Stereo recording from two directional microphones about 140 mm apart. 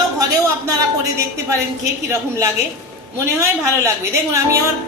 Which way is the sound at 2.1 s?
20° right (ahead or behind).